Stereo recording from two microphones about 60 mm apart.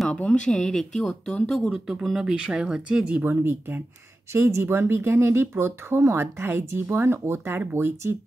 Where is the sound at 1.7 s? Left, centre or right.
Centre.